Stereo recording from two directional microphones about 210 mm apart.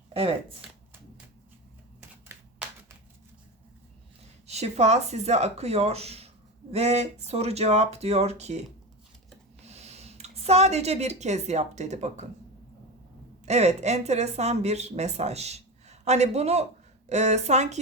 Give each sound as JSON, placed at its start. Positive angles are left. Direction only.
{"t": 0.1, "sound": "speech", "side_deg": -25}
{"t": 2.0, "sound": "typewriter", "side_deg": -10}
{"t": 4.4, "sound": "speech", "side_deg": -30}
{"t": 9.6, "sound": "a woman's voice", "side_deg": -30}
{"t": 13.4, "sound": "speech", "side_deg": -30}